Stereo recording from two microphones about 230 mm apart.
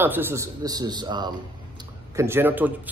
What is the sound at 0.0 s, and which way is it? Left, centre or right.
Speech, centre.